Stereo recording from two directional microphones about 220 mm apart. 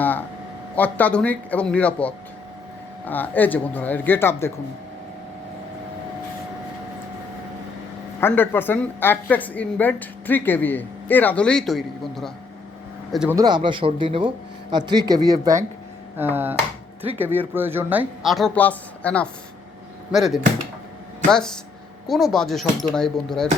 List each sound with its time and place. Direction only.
0.0 s a sound: 10° left (ahead or behind)
0.8 s a woman's voice: 5° left (ahead or behind)
8.2 s a woman's voice: 10° left (ahead or behind)
13.1 s speech: 10° right (ahead or behind)